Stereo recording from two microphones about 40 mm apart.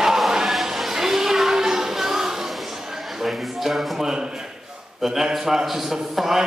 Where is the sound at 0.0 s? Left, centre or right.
Centre.